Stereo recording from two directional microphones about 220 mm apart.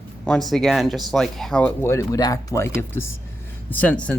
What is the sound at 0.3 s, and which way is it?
Speech, centre (ahead or behind).